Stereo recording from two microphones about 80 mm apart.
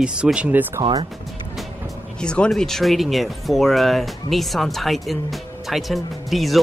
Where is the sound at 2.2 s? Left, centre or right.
Centre.